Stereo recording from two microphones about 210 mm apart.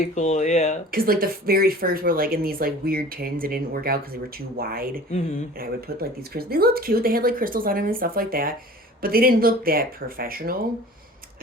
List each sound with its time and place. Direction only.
0.1 s speech: 35° left (ahead or behind)
0.9 s speech: 45° right (ahead or behind)